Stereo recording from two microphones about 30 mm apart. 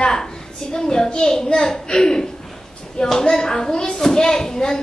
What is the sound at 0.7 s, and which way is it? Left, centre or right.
Speech, left.